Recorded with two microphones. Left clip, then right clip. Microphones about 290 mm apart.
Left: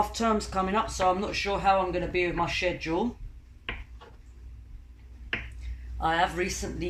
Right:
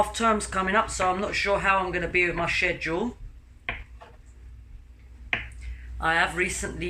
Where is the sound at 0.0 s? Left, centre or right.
Centre.